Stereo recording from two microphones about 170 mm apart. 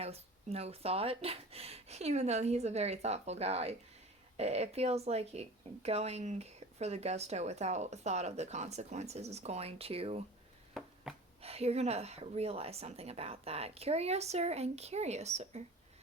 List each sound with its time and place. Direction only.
0.0 s a woman's voice: 35° right (ahead or behind)
10.8 s a sound: centre (ahead or behind)
11.4 s a woman's voice: 35° right (ahead or behind)